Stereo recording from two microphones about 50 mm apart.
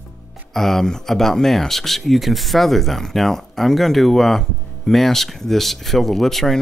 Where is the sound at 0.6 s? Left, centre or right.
Centre.